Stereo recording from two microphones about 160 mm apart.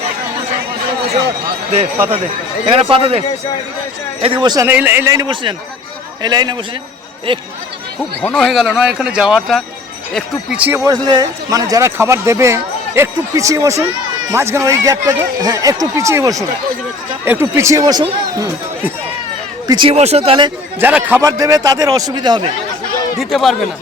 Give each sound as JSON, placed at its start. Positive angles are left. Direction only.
{"t": 2.9, "sound": "speech", "side_deg": -35}
{"t": 4.6, "sound": "speech", "side_deg": -10}
{"t": 8.2, "sound": "a man's voice", "side_deg": 5}
{"t": 10.8, "sound": "speech", "side_deg": -25}
{"t": 19.6, "sound": "speech", "side_deg": -30}
{"t": 20.0, "sound": "speech", "side_deg": -40}
{"t": 20.8, "sound": "speech", "side_deg": -10}
{"t": 23.1, "sound": "a man's voice", "side_deg": 0}